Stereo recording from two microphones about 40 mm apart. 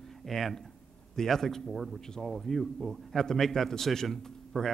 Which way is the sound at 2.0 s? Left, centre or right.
Centre.